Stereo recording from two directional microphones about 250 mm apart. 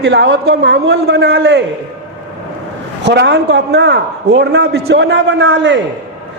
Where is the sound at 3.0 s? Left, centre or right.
Right.